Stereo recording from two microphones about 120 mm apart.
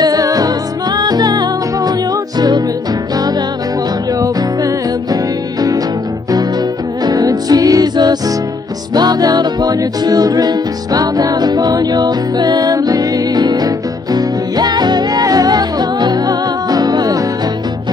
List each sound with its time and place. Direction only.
0.0 s music: 30° right (ahead or behind)
4.2 s music: 30° right (ahead or behind)
7.1 s music: 30° right (ahead or behind)